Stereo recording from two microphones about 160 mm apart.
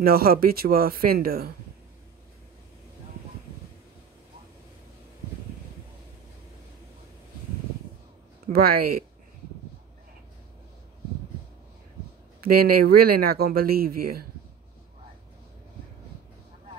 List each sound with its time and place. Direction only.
0.0 s speech: 70° right (ahead or behind)
8.5 s speech: 70° right (ahead or behind)
12.4 s speech: 70° right (ahead or behind)